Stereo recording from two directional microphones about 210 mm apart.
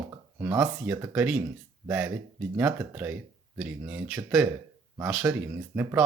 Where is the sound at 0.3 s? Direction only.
10° right (ahead or behind).